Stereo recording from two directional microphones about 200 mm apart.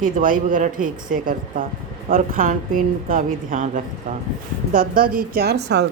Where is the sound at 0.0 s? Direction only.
45° right (ahead or behind).